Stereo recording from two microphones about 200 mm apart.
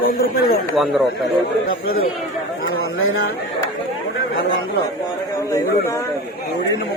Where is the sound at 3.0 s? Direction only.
90° left.